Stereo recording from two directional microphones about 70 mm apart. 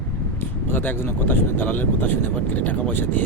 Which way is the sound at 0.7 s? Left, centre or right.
Left.